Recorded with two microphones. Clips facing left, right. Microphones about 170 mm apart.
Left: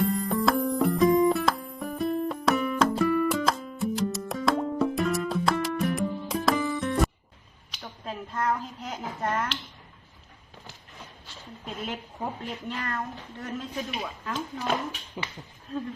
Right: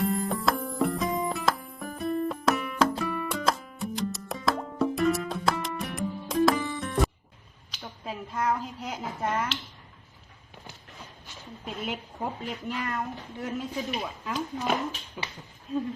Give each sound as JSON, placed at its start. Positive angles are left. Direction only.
{"t": 0.0, "sound": "music", "side_deg": 0}
{"t": 7.8, "sound": "a sound", "side_deg": -5}
{"t": 11.6, "sound": "speech", "side_deg": -5}
{"t": 15.2, "sound": "speech", "side_deg": 20}